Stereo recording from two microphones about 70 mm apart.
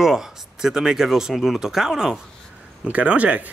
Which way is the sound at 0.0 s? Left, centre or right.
Centre.